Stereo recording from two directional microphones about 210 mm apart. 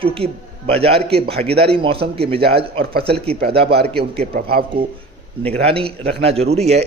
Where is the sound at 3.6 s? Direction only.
50° right (ahead or behind).